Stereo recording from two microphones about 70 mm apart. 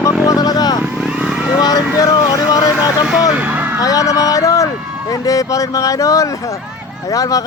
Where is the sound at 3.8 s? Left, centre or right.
Left.